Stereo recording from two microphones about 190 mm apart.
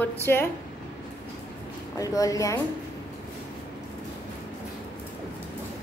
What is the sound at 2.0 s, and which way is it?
Speech, 20° left (ahead or behind).